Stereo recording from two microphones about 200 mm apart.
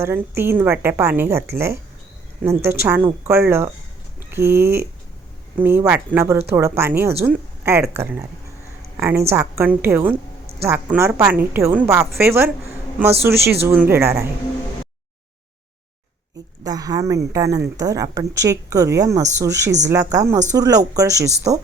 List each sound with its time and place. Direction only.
0.0 s a woman's voice: 10° right (ahead or behind)
13.4 s speech: 55° right (ahead or behind)
13.7 s a woman's voice: 10° right (ahead or behind)
16.6 s a woman's voice: 20° right (ahead or behind)